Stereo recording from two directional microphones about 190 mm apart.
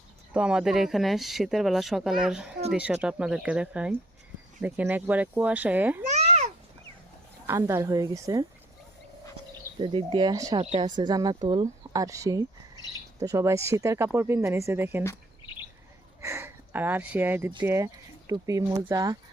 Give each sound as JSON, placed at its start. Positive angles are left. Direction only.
{"t": 0.3, "sound": "a woman's voice", "side_deg": -5}
{"t": 6.1, "sound": "babbling", "side_deg": -35}
{"t": 7.4, "sound": "a woman's voice", "side_deg": -15}
{"t": 9.8, "sound": "a woman's voice", "side_deg": -25}
{"t": 16.2, "sound": "a sound", "side_deg": -15}
{"t": 17.7, "sound": "a woman's voice", "side_deg": -15}